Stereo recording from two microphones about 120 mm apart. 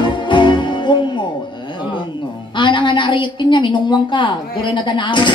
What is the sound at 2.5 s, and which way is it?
A woman's voice, 40° left (ahead or behind).